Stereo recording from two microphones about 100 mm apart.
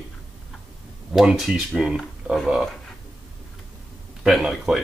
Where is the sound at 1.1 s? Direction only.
5° right (ahead or behind).